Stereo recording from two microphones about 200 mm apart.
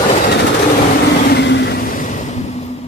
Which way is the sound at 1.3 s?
60° left (ahead or behind).